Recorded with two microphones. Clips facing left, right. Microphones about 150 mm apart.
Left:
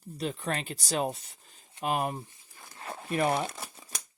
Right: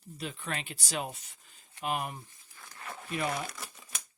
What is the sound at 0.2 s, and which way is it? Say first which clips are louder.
Speech: left 6 dB; 35° left (ahead or behind).